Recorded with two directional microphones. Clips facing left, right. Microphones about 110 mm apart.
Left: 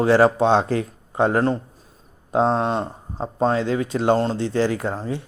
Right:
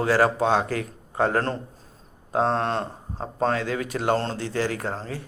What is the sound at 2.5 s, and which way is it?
Speech, 10° left (ahead or behind).